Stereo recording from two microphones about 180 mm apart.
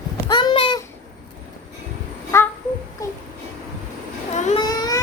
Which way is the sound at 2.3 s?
15° left (ahead or behind).